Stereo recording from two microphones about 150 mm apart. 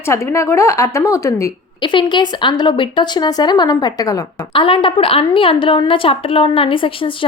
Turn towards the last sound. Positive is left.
turn(degrees=35)  # may be behind; listen again after turning